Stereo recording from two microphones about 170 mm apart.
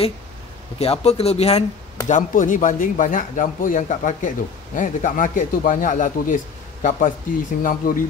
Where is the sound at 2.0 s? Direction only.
50° left (ahead or behind).